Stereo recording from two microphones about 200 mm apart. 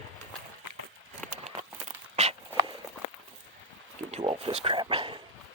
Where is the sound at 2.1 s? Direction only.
35° right (ahead or behind).